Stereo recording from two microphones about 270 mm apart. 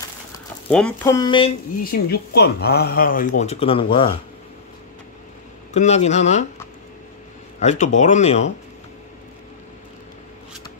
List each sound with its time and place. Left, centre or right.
0.7 s speech: centre
1.8 s speech: left
5.7 s speech: left
7.6 s speech: left